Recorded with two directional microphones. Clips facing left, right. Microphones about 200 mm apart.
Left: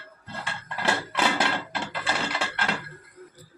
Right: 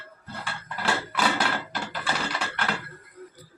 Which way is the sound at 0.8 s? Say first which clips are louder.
Even; 25° left (ahead or behind).